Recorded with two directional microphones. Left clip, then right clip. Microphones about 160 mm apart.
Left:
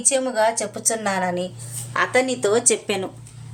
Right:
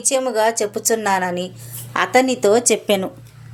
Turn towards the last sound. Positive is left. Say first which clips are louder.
# right 4 dB
turn(degrees=-35)  # may be behind; listen again after turning